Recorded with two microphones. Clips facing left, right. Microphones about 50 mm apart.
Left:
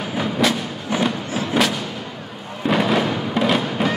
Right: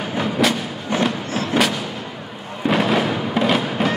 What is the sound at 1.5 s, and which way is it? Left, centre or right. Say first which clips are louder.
Artillery fire: even; centre.